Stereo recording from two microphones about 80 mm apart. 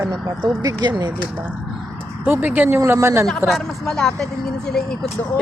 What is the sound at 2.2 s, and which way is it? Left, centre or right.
Speech, right.